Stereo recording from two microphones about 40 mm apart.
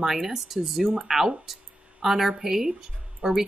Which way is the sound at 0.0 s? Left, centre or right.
Centre.